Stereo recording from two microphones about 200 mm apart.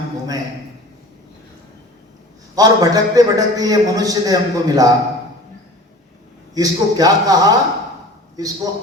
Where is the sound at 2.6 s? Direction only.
20° right (ahead or behind).